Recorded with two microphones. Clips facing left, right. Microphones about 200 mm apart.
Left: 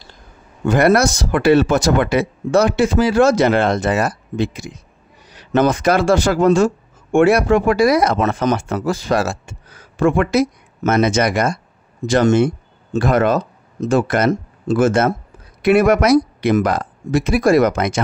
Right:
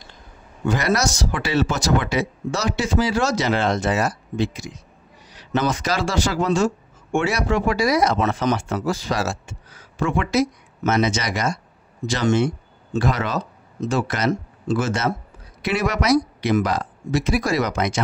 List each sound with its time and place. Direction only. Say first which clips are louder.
0.7 s speech: left 7 dB; 55° left (ahead or behind)